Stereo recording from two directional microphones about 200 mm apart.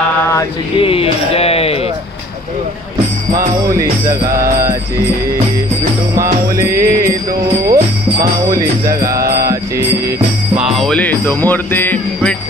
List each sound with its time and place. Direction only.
0.7 s a sound: 30° left (ahead or behind)
4.1 s music: 15° right (ahead or behind)
6.5 s music: 15° right (ahead or behind)
7.6 s jingle bell: 15° right (ahead or behind)
9.4 s music: 15° right (ahead or behind)
10.8 s jingle bell: 5° left (ahead or behind)